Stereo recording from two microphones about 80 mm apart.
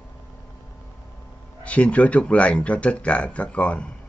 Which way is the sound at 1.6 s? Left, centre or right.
Centre.